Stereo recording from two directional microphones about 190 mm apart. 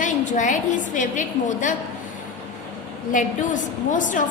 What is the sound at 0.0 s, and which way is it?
A woman's voice, 40° left (ahead or behind).